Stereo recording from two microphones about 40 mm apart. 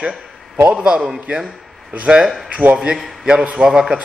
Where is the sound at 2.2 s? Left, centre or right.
Centre.